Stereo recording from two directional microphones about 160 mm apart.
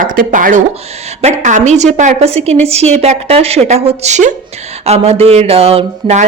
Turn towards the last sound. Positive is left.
turn(degrees=-40)  # may be behind; listen again after turning